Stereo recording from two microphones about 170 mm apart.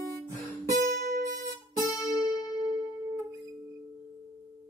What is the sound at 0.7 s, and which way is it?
Music, 55° right (ahead or behind).